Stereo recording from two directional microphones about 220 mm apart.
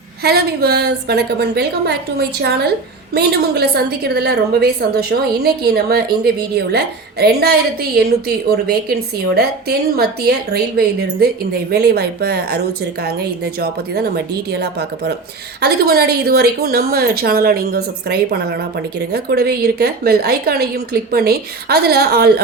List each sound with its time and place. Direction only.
0.2 s a woman's voice: 45° right (ahead or behind)